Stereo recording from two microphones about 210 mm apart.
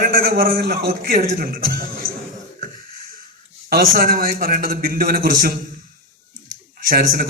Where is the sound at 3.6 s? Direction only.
45° right (ahead or behind).